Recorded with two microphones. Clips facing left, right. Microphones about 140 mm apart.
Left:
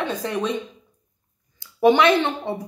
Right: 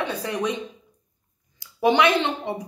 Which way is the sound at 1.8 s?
20° right (ahead or behind).